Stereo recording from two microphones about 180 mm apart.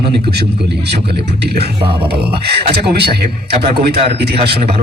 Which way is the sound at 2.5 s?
60° right (ahead or behind).